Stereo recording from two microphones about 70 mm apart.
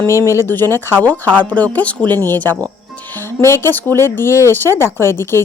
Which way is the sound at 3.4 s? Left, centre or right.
Left.